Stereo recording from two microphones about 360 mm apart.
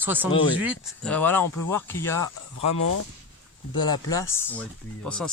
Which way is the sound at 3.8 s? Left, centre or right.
Centre.